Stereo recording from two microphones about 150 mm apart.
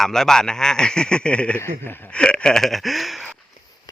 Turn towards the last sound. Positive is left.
turn(degrees=0)  # may be behind; listen again after turning